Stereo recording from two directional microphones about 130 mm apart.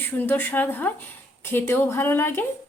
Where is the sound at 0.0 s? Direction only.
15° left (ahead or behind).